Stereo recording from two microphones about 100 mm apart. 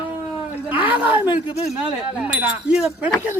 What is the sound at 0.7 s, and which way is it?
Speech, 15° right (ahead or behind).